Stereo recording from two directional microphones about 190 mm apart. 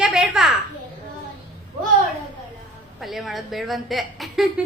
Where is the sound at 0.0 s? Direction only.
Centre (ahead or behind).